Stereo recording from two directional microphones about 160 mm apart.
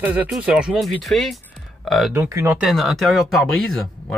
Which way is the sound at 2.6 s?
Centre (ahead or behind).